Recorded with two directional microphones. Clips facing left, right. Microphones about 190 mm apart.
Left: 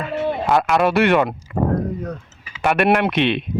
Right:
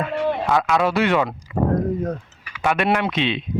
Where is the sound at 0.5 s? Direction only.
60° left (ahead or behind).